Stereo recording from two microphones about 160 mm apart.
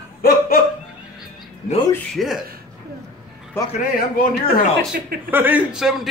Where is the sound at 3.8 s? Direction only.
65° left (ahead or behind).